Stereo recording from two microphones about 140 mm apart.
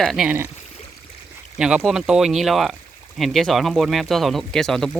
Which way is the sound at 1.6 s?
5° right (ahead or behind).